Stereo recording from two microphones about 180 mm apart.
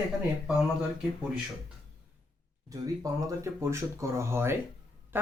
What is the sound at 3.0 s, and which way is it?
Speech, 15° right (ahead or behind).